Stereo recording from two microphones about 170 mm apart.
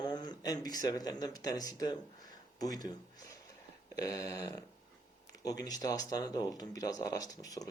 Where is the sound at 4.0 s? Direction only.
20° left (ahead or behind).